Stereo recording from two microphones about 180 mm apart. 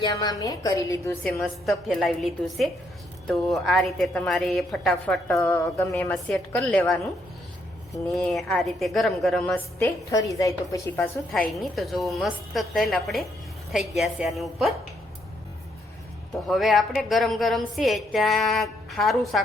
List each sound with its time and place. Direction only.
0.0 s a woman's voice: 20° left (ahead or behind)
1.4 s a woman's voice: centre (ahead or behind)
5.3 s a woman's voice: 15° left (ahead or behind)
8.1 s a woman's voice: centre (ahead or behind); by 11.1 s 15° left (ahead or behind)
11.3 s a woman's voice: centre (ahead or behind)
16.5 s a woman's voice: centre (ahead or behind)